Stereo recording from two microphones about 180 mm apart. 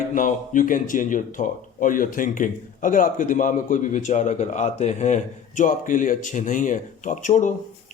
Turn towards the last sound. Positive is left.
turn(degrees=45)  # may be behind; listen again after turning